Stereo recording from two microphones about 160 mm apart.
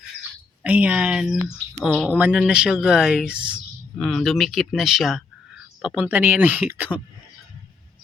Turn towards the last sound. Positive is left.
turn(degrees=-10)  # may be behind; listen again after turning